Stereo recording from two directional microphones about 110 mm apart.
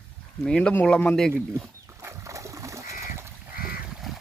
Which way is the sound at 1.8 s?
30° right (ahead or behind).